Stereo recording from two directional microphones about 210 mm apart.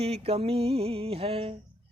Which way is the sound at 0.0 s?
30° right (ahead or behind).